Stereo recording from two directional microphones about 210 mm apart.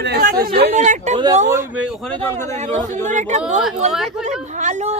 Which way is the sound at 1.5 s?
10° right (ahead or behind).